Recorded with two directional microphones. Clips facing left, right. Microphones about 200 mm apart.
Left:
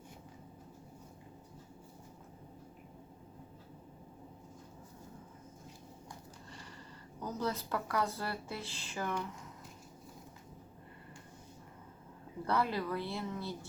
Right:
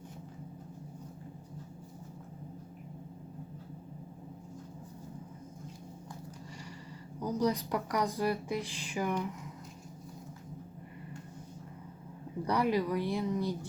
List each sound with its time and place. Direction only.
7.2 s speech: 10° right (ahead or behind)
12.5 s speech: 15° right (ahead or behind)